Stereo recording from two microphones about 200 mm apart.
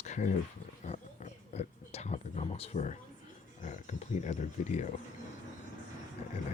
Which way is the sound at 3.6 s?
35° left (ahead or behind).